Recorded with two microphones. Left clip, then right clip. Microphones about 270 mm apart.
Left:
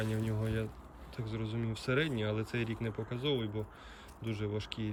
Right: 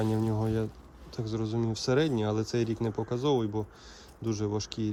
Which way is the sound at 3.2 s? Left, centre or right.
Right.